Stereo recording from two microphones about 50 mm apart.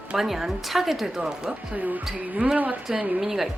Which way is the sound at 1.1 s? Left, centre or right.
Centre.